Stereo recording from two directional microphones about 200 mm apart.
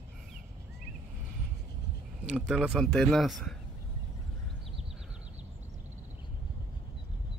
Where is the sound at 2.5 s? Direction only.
5° right (ahead or behind).